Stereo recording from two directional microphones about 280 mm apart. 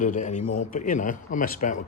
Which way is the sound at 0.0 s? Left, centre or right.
Left.